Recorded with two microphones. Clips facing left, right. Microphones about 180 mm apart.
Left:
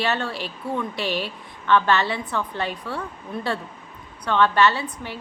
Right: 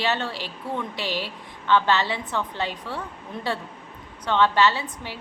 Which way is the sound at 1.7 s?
15° right (ahead or behind).